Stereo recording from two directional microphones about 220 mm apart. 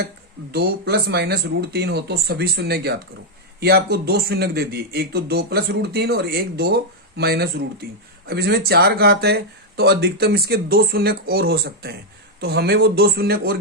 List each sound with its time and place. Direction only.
0.5 s a man's voice: 45° right (ahead or behind)